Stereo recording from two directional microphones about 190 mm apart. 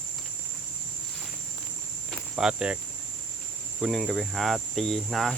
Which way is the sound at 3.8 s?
Centre (ahead or behind).